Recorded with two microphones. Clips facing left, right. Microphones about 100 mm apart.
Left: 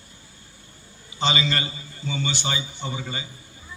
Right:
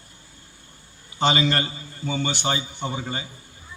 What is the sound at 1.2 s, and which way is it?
A man's voice, 55° right (ahead or behind).